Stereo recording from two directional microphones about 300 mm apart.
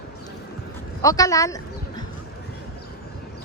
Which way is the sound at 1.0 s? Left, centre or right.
Centre.